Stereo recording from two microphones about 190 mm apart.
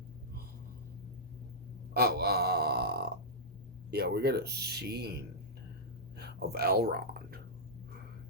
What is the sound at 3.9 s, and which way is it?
Speech, 60° right (ahead or behind).